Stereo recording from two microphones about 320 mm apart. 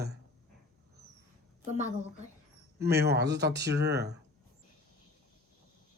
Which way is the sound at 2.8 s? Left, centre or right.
Right.